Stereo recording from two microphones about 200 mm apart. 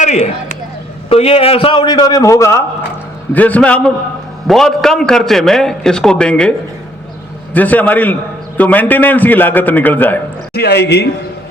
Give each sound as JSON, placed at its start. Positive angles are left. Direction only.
{"t": 0.0, "sound": "a man's voice", "side_deg": 35}
{"t": 7.5, "sound": "a man's voice", "side_deg": 10}
{"t": 10.5, "sound": "speech", "side_deg": 55}